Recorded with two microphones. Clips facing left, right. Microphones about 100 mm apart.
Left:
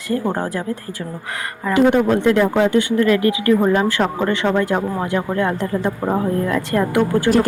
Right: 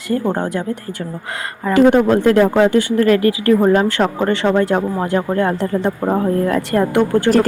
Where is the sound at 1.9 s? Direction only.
40° right (ahead or behind).